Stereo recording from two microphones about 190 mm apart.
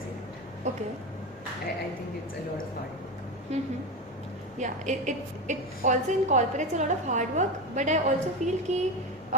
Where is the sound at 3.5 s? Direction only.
35° right (ahead or behind).